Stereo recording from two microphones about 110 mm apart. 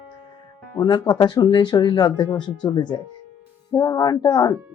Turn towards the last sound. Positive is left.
turn(degrees=35)  # may be behind; listen again after turning